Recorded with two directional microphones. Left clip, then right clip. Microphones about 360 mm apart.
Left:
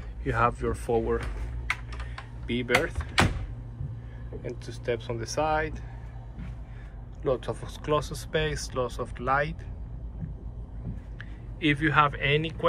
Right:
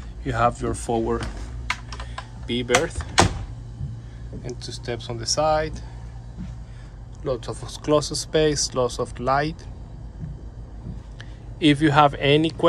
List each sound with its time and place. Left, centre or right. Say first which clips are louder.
0.2 s speech: right 4 dB; centre
1.7 s computer keyboard: right 3 dB; right
2.4 s speech: right 4 dB; centre
4.4 s speech: right 4 dB; centre
7.2 s speech: right 1 dB; centre
11.1 s speech: right 8 dB; centre